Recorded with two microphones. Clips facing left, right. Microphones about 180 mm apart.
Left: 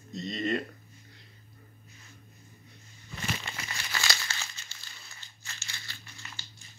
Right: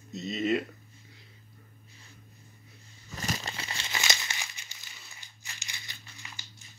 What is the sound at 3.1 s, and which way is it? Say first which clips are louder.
Crumpling: right 1 dB; 40° right (ahead or behind).